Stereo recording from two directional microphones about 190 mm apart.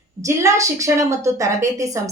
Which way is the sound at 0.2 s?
15° right (ahead or behind).